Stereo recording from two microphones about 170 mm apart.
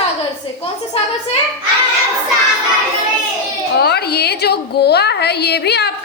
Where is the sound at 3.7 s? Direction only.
70° left (ahead or behind).